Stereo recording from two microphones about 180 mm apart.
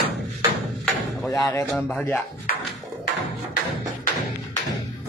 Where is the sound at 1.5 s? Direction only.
15° left (ahead or behind).